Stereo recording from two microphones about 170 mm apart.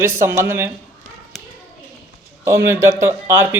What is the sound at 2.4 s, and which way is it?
A man's voice, 15° right (ahead or behind).